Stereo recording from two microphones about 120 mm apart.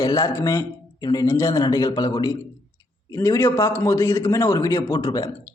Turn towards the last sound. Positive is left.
turn(degrees=35)  # may be behind; listen again after turning